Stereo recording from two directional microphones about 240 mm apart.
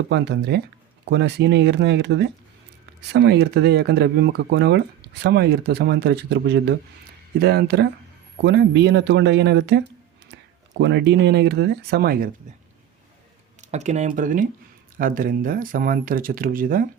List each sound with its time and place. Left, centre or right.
0.1 s speech: right
13.6 s speech: right